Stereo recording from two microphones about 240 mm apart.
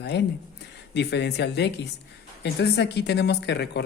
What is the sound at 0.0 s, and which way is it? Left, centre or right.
A woman's voice, left.